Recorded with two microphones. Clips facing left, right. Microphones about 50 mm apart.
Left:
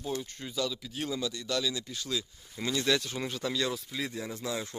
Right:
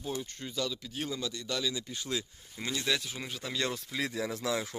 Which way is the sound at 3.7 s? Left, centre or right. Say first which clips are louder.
Right 2 dB; right.